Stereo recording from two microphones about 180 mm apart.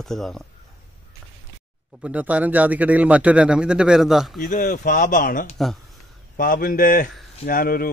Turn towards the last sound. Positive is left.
turn(degrees=55)  # may be behind; listen again after turning